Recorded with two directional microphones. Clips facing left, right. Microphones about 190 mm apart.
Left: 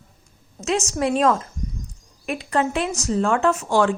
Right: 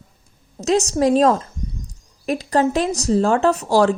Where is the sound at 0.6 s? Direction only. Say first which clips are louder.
Right 5 dB; 35° right (ahead or behind).